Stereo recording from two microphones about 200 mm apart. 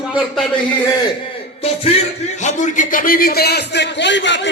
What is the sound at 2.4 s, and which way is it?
A man's voice, 35° left (ahead or behind).